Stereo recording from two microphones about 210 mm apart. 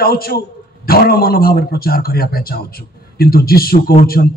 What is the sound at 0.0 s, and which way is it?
Speech, 45° left (ahead or behind).